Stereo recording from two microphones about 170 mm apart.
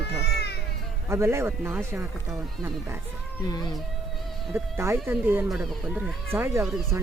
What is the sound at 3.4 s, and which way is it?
Speech, 25° left (ahead or behind).